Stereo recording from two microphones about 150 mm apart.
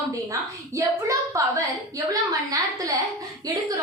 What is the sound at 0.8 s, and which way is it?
A woman's voice, 20° right (ahead or behind).